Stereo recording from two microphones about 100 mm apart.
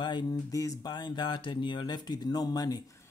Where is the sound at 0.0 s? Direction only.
50° left (ahead or behind).